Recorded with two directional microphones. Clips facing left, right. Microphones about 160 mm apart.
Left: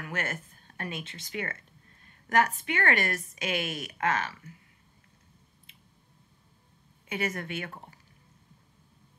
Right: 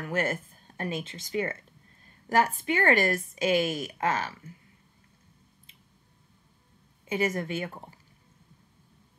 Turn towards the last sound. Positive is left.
turn(degrees=-30)  # may be behind; listen again after turning